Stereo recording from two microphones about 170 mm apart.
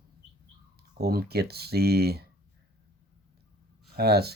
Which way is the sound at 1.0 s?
65° right (ahead or behind).